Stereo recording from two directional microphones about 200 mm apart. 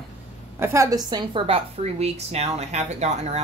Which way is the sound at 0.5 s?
15° right (ahead or behind).